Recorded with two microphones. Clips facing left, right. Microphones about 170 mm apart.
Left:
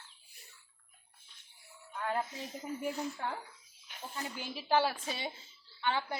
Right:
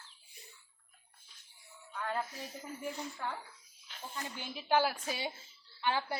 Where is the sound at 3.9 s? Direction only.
15° left (ahead or behind).